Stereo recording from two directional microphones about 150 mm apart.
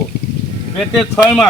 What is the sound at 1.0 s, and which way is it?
Speech, 5° left (ahead or behind).